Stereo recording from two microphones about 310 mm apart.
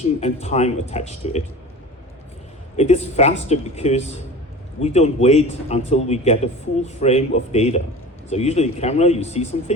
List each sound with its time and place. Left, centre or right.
0.0 s a man's voice: left
2.7 s a man's voice: left